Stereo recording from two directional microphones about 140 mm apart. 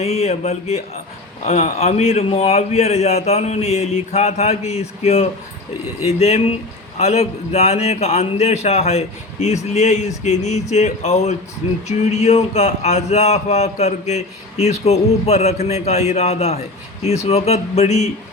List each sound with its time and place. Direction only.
0.0 s speech: 50° left (ahead or behind)